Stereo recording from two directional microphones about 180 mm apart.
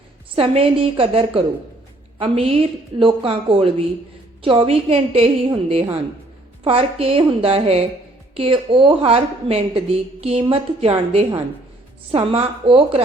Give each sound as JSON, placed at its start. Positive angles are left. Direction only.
{"t": 0.3, "sound": "a woman's voice", "side_deg": -30}
{"t": 6.7, "sound": "a woman's voice", "side_deg": -35}